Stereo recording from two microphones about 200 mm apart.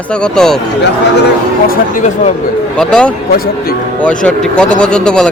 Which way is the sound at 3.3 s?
50° left (ahead or behind).